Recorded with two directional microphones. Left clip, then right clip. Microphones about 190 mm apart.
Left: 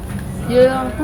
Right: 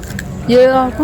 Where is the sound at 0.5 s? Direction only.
45° right (ahead or behind).